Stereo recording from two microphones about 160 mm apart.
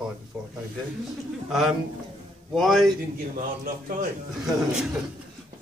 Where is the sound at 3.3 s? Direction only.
60° right (ahead or behind).